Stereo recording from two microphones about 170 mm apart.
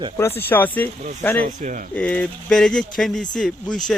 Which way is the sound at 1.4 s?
50° right (ahead or behind).